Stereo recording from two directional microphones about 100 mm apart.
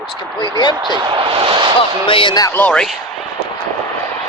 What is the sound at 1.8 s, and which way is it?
Speech, 60° left (ahead or behind).